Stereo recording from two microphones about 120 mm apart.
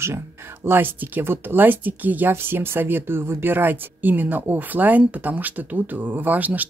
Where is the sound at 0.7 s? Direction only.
15° right (ahead or behind).